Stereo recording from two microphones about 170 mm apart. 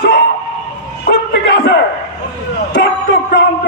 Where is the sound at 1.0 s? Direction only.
80° left.